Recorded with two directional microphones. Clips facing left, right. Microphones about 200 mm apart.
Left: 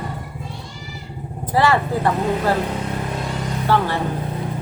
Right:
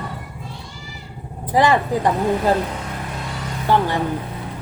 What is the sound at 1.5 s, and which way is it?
A woman's voice, 15° right (ahead or behind).